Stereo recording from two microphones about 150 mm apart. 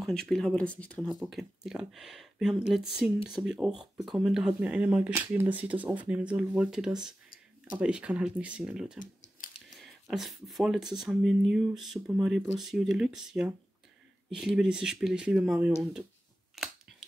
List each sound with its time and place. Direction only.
0.0 s speech: 5° left (ahead or behind)
1.0 s speech: 5° right (ahead or behind)
9.0 s typing: 60° left (ahead or behind)
9.7 s speech: centre (ahead or behind)